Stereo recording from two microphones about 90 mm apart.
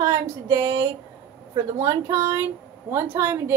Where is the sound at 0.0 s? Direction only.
40° right (ahead or behind).